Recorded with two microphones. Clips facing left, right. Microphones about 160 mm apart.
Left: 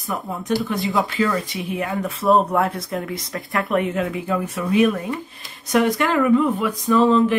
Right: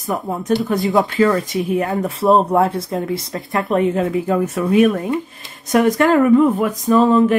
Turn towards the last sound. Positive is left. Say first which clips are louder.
# right 3 dB
turn(degrees=-45)  # may be behind; listen again after turning